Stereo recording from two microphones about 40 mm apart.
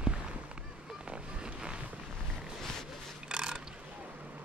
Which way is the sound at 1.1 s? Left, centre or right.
Right.